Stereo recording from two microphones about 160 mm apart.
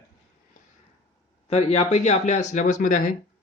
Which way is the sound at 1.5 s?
40° left (ahead or behind).